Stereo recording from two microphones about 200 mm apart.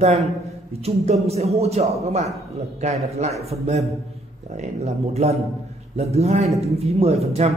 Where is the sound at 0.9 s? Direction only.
30° right (ahead or behind).